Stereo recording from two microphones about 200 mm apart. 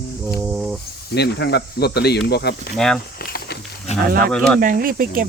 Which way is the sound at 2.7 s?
Centre (ahead or behind).